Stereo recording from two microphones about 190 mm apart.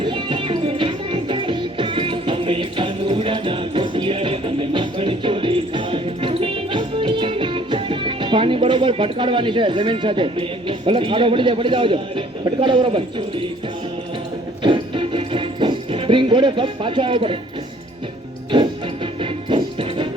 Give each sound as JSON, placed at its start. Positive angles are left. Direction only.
{"t": 0.0, "sound": "music", "side_deg": -25}
{"t": 14.6, "sound": "music", "side_deg": -25}
{"t": 19.2, "sound": "music", "side_deg": -25}